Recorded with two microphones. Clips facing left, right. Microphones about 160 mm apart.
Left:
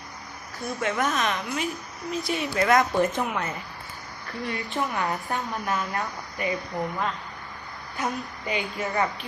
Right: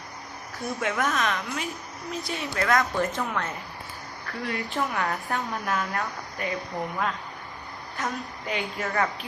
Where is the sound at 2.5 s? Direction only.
15° left (ahead or behind).